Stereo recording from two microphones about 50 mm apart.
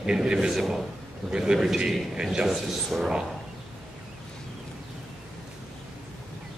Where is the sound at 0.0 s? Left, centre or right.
Centre.